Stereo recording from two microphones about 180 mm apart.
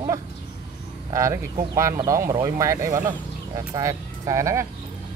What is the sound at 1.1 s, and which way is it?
Speech, 15° right (ahead or behind).